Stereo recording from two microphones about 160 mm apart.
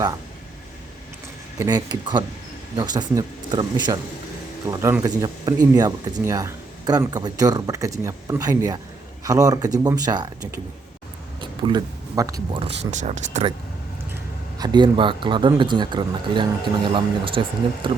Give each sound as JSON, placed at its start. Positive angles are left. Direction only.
{"t": 1.5, "sound": "speech", "side_deg": -25}
{"t": 11.3, "sound": "a sound", "side_deg": -30}
{"t": 12.5, "sound": "speech", "side_deg": -40}
{"t": 14.6, "sound": "speech", "side_deg": -25}